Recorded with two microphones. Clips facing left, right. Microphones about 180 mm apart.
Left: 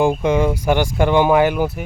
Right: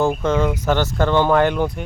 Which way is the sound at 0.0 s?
15° left (ahead or behind).